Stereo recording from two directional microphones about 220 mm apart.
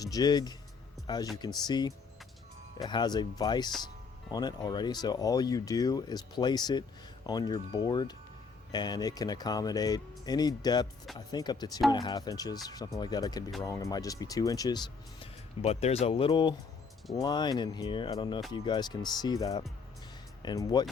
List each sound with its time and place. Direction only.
0.0 s speech: 15° left (ahead or behind)
15.2 s speech: 30° left (ahead or behind)